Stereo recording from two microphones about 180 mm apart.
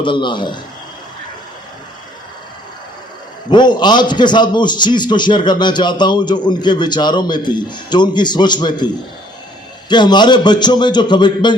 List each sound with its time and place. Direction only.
0.0 s a man's voice: 25° left (ahead or behind)
3.5 s a man's voice: 25° left (ahead or behind)
9.9 s a man's voice: 25° left (ahead or behind)